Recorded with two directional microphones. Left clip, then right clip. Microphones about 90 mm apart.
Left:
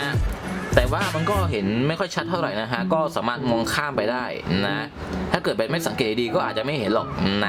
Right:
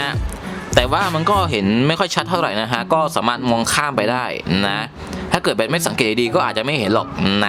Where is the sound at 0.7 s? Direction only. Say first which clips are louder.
Right 6 dB; 40° right (ahead or behind).